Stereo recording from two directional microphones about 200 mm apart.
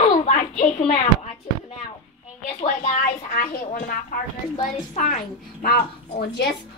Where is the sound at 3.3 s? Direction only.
45° left (ahead or behind).